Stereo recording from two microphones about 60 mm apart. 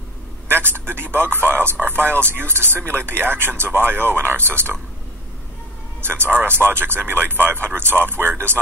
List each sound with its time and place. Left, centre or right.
0.5 s a man's voice: right
5.9 s a man's voice: right